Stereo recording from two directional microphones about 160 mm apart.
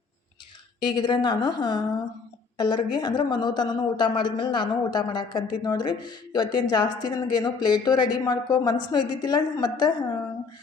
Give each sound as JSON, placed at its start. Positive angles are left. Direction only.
{"t": 0.9, "sound": "speech", "side_deg": 30}